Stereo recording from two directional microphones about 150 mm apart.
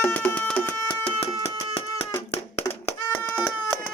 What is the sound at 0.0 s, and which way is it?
Music, 10° left (ahead or behind).